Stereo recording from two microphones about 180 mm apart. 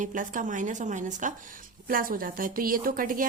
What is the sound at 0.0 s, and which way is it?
A woman's voice, 45° right (ahead or behind).